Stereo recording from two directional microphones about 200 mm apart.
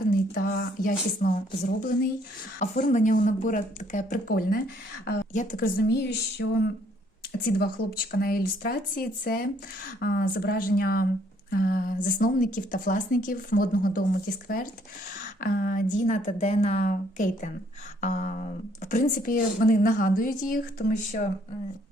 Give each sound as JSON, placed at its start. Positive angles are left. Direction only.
{"t": 0.3, "sound": "a woman's voice", "side_deg": 50}
{"t": 5.9, "sound": "a sound", "side_deg": 55}
{"t": 7.6, "sound": "a woman's voice", "side_deg": 50}